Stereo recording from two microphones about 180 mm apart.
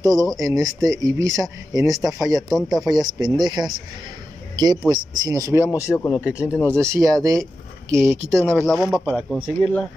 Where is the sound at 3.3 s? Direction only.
25° right (ahead or behind).